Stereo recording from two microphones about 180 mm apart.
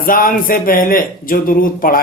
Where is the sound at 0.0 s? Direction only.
50° left (ahead or behind).